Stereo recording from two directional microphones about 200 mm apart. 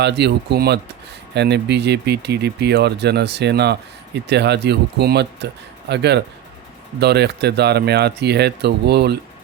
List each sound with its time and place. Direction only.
0.0 s speech: 55° right (ahead or behind)